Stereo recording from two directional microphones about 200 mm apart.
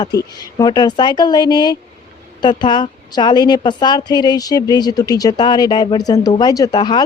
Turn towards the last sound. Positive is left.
turn(degrees=20)  # may be behind; listen again after turning